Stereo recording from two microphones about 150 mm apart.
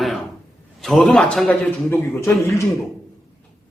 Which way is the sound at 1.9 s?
20° left (ahead or behind).